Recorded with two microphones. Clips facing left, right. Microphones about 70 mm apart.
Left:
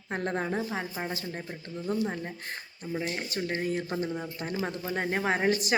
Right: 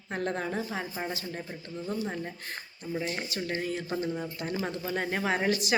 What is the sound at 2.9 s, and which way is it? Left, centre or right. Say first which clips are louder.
Speech: even; centre.